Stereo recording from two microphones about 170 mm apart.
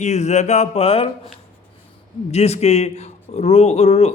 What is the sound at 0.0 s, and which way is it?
Speech, 40° left (ahead or behind).